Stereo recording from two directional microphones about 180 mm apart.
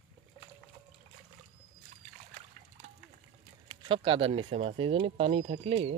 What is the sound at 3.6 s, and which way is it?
Speech, 30° right (ahead or behind).